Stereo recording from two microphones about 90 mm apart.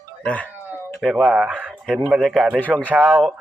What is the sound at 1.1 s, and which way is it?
Speech, 5° right (ahead or behind).